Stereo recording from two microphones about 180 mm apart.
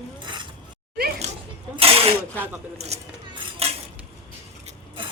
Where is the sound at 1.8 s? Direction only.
30° right (ahead or behind).